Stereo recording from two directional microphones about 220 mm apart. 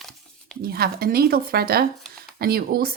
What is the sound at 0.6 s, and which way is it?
Speech, 45° right (ahead or behind).